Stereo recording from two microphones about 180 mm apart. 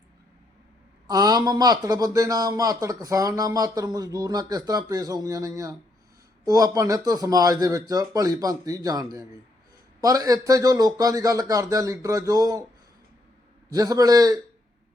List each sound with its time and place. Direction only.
1.0 s speech: 20° right (ahead or behind)
13.7 s speech: 20° right (ahead or behind)